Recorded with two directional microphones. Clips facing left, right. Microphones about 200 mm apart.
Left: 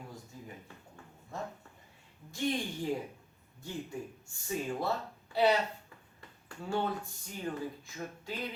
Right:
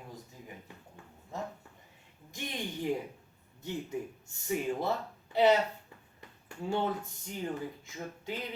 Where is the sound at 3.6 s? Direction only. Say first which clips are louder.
Right 3 dB; 20° right (ahead or behind).